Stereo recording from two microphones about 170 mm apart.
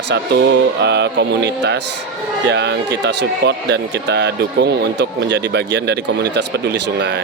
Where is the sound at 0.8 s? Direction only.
90° right.